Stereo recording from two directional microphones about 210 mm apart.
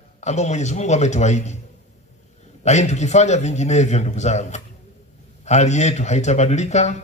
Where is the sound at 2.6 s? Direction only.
35° left (ahead or behind).